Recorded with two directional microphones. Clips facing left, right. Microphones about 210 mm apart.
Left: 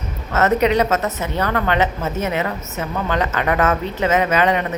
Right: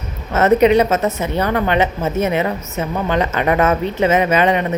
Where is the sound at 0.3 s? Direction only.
20° right (ahead or behind).